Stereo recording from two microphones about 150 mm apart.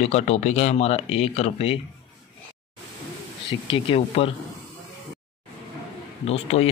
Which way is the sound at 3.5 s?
35° left (ahead or behind).